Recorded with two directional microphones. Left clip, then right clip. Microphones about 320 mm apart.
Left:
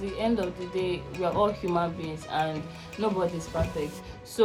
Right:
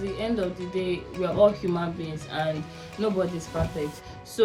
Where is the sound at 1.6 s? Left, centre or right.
Centre.